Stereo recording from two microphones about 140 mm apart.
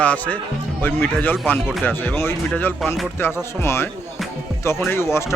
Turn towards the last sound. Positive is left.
turn(degrees=20)  # may be behind; listen again after turning